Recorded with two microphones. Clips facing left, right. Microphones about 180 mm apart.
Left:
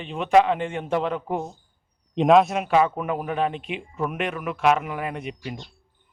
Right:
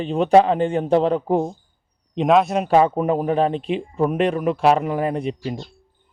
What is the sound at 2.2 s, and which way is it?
Speech, centre (ahead or behind).